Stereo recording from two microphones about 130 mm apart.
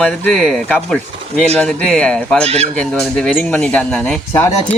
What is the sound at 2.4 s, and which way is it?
Speech, 50° right (ahead or behind).